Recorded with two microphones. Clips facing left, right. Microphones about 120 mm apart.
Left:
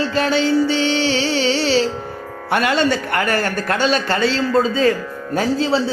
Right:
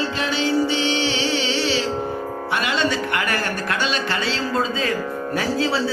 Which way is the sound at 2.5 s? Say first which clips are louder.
Left 6 dB; 50° left (ahead or behind).